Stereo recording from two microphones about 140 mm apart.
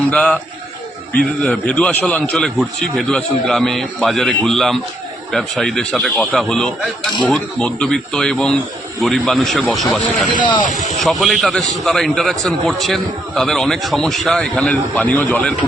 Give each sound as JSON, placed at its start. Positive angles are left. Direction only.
{"t": 0.1, "sound": "a man's voice", "side_deg": 10}
{"t": 10.3, "sound": "speech", "side_deg": 35}
{"t": 11.0, "sound": "a man's voice", "side_deg": 0}